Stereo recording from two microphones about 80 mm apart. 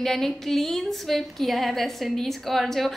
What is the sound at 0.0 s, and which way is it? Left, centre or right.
A woman's voice, centre.